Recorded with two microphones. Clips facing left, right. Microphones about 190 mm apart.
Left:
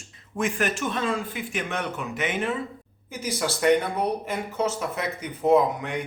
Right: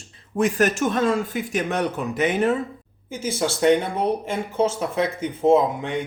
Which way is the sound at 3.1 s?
25° right (ahead or behind).